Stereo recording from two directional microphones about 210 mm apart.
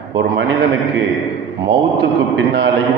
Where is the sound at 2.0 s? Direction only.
55° right (ahead or behind).